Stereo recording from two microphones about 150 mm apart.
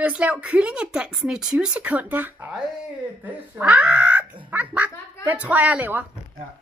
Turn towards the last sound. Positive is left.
turn(degrees=-10)  # may be behind; listen again after turning